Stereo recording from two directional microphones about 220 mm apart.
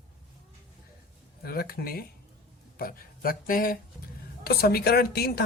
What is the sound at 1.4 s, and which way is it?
A woman's voice, 45° left (ahead or behind).